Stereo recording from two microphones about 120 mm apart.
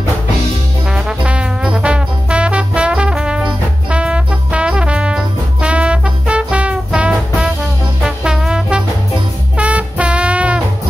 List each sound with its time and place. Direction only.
0.9 s music: 10° right (ahead or behind)